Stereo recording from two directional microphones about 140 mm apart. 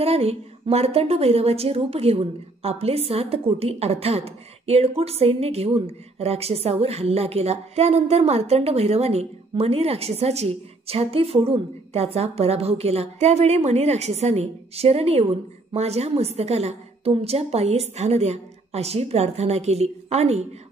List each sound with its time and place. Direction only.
0.0 s a woman's voice: 45° right (ahead or behind)